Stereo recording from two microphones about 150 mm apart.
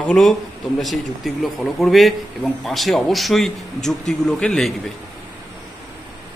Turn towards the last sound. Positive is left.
turn(degrees=5)  # may be behind; listen again after turning